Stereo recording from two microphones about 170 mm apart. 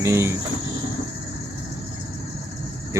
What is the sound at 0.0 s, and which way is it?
Speech, 15° right (ahead or behind).